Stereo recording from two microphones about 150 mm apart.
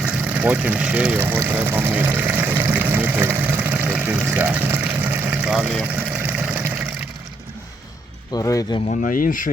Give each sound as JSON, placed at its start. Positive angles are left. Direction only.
{"t": 0.0, "sound": "vehicle", "side_deg": -10}
{"t": 8.3, "sound": "speech", "side_deg": 25}
{"t": 8.9, "sound": "speech", "side_deg": 65}